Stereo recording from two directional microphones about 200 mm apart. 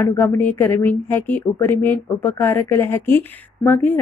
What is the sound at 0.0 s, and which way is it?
Speech, 10° left (ahead or behind).